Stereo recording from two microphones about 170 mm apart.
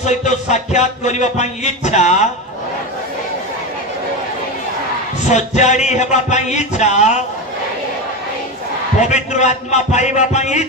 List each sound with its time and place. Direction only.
0.0 s music: 45° left (ahead or behind)
5.3 s music: 45° left (ahead or behind)
9.0 s music: 45° left (ahead or behind)